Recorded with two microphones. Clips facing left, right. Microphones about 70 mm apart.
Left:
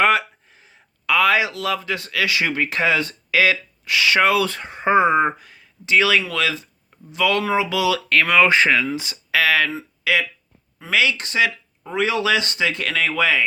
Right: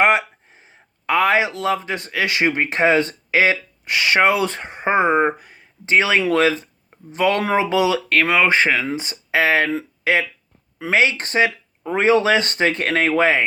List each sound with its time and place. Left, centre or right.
0.0 s speech: right
8.1 s speech: centre; by 13.4 s right